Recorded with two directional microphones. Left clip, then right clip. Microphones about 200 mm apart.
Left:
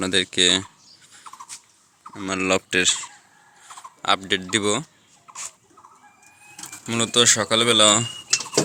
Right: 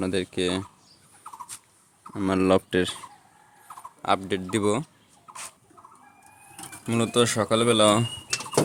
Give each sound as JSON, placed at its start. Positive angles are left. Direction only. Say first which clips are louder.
{"t": 0.0, "sound": "speech", "louder": "left 7 dB", "side_deg": 5}
{"t": 2.1, "sound": "speech", "louder": "right 1 dB", "side_deg": -25}
{"t": 4.0, "sound": "speech", "louder": "left 4 dB", "side_deg": -5}
{"t": 5.3, "sound": "rodents", "louder": "left 3 dB", "side_deg": -5}
{"t": 6.8, "sound": "speech", "louder": "left 5 dB", "side_deg": -10}